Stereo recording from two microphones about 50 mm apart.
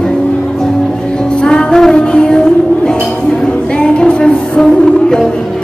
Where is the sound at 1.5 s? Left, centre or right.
Centre.